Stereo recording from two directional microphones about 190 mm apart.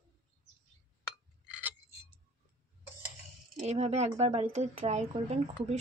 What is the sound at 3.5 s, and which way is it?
A woman's voice, 35° right (ahead or behind).